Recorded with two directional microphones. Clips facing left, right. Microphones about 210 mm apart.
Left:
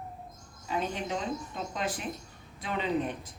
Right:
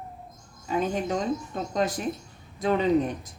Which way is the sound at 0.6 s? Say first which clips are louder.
Right 6 dB; 45° right (ahead or behind).